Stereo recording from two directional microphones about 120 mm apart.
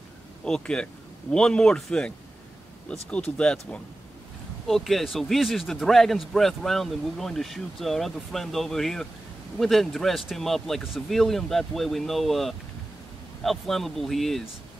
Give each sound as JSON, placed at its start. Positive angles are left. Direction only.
{"t": 0.5, "sound": "a man's voice", "side_deg": 5}